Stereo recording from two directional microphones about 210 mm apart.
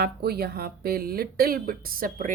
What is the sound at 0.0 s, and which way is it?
Speech, 50° right (ahead or behind).